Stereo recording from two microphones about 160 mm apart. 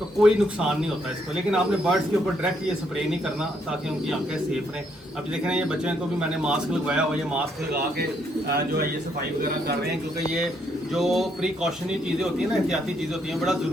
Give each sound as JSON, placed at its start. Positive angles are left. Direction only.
{"t": 0.2, "sound": "a man's voice", "side_deg": -5}
{"t": 3.7, "sound": "a man's voice", "side_deg": -5}
{"t": 8.4, "sound": "speech", "side_deg": -80}
{"t": 10.9, "sound": "a man's voice", "side_deg": 0}